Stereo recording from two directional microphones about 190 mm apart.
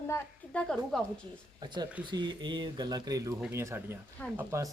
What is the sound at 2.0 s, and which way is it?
Speech, 20° right (ahead or behind).